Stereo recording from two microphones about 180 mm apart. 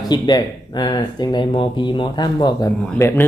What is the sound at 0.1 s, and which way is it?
Speech, 25° left (ahead or behind).